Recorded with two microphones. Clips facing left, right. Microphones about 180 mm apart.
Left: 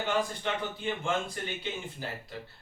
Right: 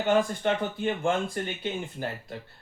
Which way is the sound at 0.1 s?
50° right (ahead or behind).